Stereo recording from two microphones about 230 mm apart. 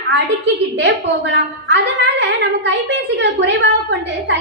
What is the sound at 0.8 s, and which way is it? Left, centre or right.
A woman's voice, right.